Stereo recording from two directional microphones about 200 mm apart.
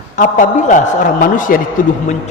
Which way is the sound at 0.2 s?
40° left (ahead or behind).